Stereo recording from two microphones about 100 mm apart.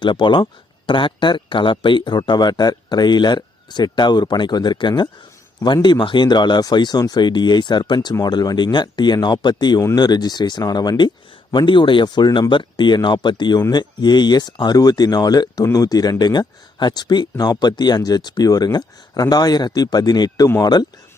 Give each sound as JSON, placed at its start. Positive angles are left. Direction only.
{"t": 0.0, "sound": "speech", "side_deg": 50}